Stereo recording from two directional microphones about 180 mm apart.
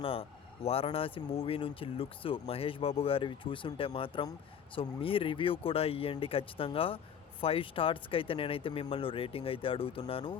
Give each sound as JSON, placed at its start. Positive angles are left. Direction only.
{"t": 0.0, "sound": "speech", "side_deg": 30}